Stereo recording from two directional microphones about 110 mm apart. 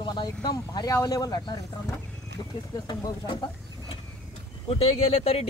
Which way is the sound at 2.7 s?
40° left (ahead or behind).